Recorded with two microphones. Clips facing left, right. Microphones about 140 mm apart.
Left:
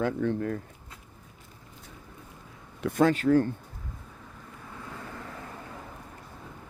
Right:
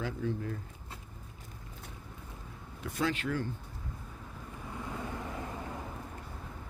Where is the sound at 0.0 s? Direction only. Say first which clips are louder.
Left 8 dB; 65° left (ahead or behind).